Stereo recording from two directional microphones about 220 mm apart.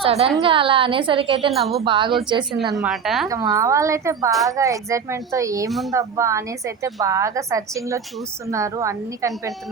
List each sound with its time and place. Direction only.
0.0 s a woman's voice: 25° right (ahead or behind)
2.7 s a woman's voice: centre (ahead or behind)
3.2 s a woman's voice: 15° right (ahead or behind)